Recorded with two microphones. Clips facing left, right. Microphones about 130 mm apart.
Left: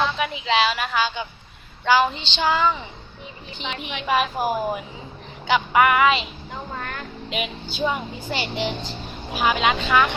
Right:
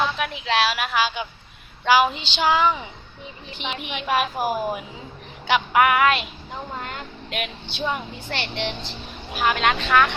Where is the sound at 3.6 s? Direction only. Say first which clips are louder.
Left 1 dB; centre (ahead or behind).